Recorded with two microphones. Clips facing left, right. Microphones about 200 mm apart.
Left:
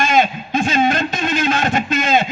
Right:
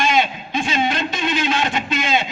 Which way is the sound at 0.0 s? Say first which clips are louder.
Left 3 dB; 45° left (ahead or behind).